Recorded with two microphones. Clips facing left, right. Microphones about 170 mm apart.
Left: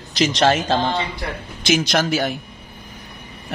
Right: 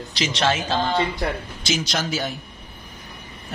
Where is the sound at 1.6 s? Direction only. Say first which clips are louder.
Left 7 dB; 60° left (ahead or behind).